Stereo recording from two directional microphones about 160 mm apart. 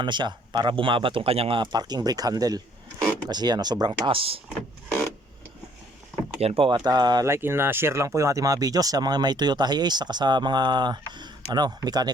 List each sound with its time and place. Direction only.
0.0 s speech: 30° right (ahead or behind)
6.4 s speech: 35° right (ahead or behind)